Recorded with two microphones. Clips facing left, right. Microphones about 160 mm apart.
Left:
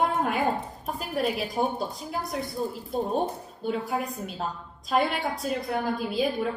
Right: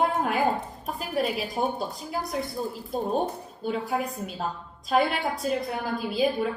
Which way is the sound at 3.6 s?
Centre (ahead or behind).